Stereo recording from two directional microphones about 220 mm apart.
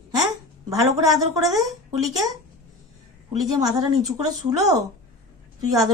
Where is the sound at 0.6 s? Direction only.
15° right (ahead or behind).